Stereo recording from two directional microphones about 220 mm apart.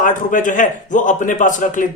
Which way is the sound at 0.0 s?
35° left (ahead or behind).